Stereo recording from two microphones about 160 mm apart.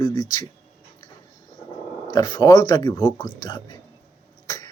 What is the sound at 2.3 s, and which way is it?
Speech, 25° left (ahead or behind).